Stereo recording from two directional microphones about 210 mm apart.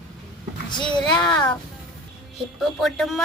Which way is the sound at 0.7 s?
20° left (ahead or behind).